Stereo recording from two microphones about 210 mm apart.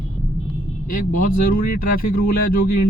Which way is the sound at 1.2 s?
40° left (ahead or behind).